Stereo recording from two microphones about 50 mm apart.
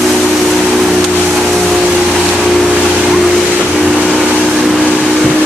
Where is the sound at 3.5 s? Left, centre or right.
Right.